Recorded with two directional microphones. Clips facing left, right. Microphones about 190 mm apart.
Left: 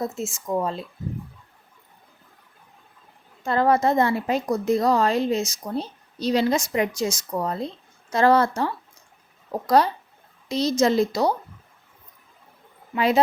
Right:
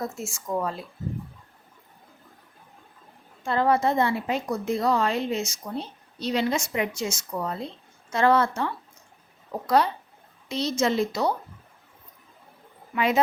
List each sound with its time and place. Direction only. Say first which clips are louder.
0.0 s speech: left 4 dB; 20° left (ahead or behind)
3.4 s a woman's voice: left 3 dB; 45° left (ahead or behind)
12.9 s a woman's voice: left 3 dB; 35° left (ahead or behind)